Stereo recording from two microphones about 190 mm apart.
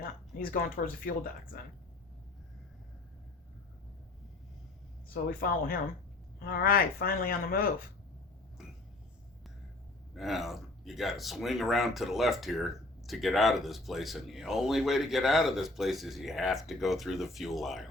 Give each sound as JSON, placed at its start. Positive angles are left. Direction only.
{"t": 0.3, "sound": "speech", "side_deg": 50}
{"t": 5.4, "sound": "speech", "side_deg": 50}
{"t": 10.2, "sound": "speech", "side_deg": 0}